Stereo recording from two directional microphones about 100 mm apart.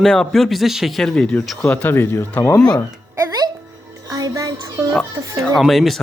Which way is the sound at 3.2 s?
35° right (ahead or behind).